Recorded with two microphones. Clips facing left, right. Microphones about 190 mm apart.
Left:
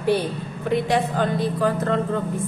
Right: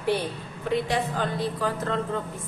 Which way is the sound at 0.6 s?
50° left (ahead or behind).